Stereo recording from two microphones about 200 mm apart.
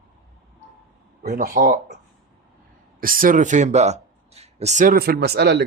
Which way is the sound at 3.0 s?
45° right (ahead or behind).